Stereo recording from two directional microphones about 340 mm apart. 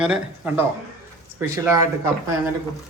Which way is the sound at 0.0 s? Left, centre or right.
Centre.